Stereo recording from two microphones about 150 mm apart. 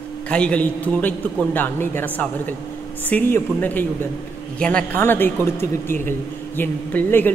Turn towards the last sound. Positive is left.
turn(degrees=15)  # may be behind; listen again after turning